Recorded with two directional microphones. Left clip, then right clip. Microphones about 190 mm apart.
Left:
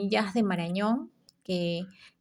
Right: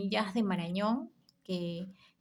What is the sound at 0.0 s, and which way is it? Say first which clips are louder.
A woman's voice: left 5 dB; 20° left (ahead or behind).